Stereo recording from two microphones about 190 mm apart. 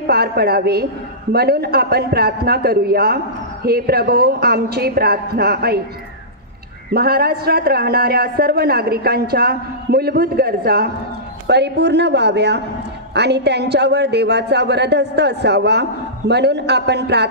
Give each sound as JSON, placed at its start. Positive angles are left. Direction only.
{"t": 0.0, "sound": "a man's voice", "side_deg": -55}
{"t": 6.9, "sound": "a man's voice", "side_deg": -55}